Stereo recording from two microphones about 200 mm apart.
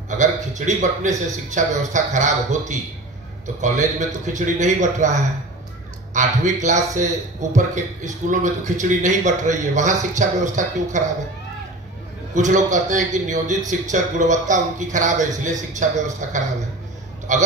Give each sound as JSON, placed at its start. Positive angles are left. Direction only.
{"t": 0.2, "sound": "a man's voice", "side_deg": -35}
{"t": 3.6, "sound": "a man's voice", "side_deg": -35}
{"t": 12.4, "sound": "a man's voice", "side_deg": -40}